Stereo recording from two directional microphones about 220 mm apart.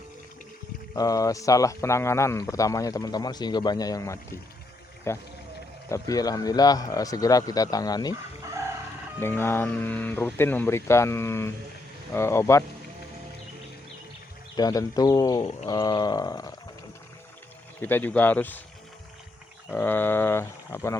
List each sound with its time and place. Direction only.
0.9 s speech: 15° left (ahead or behind)
9.2 s speech: 10° left (ahead or behind)
14.5 s speech: 15° left (ahead or behind)
17.7 s speech: 10° left (ahead or behind)
19.7 s speech: 10° left (ahead or behind)